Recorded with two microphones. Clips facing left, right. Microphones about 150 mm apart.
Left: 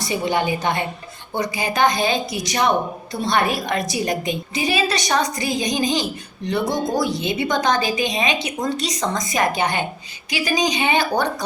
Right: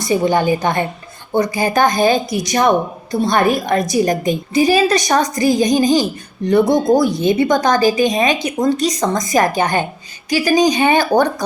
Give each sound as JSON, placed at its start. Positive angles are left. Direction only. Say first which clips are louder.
{"t": 0.1, "sound": "a woman's voice", "louder": "right 7 dB", "side_deg": -40}